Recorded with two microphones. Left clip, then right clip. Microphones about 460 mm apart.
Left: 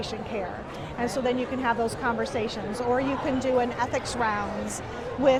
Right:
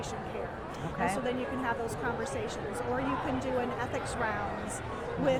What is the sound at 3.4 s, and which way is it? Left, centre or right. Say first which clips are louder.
Speech: left 8 dB; left.